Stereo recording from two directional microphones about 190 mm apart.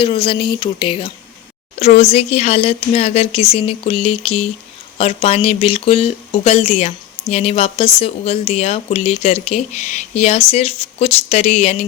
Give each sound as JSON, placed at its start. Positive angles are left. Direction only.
{"t": 0.0, "sound": "speech", "side_deg": 25}